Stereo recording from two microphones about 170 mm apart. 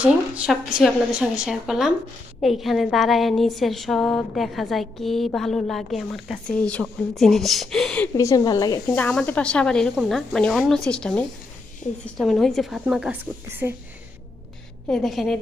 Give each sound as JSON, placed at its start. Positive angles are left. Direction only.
{"t": 0.0, "sound": "a woman's voice", "side_deg": -5}
{"t": 8.1, "sound": "a woman's voice", "side_deg": 20}
{"t": 9.0, "sound": "a woman's voice", "side_deg": 10}
{"t": 14.8, "sound": "a woman's voice", "side_deg": 0}